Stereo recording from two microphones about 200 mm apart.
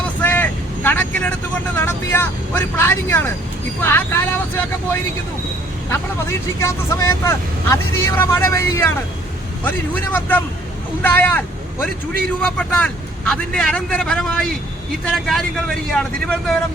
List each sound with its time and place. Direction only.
0.2 s vehicle: 10° left (ahead or behind)
1.7 s speech: 10° left (ahead or behind)
6.6 s a man's voice: 15° left (ahead or behind)